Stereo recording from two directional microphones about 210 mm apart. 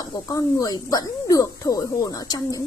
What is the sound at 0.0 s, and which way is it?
A woman's voice, 15° left (ahead or behind).